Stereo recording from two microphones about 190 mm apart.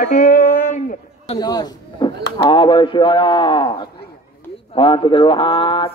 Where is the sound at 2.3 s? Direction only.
25° left (ahead or behind).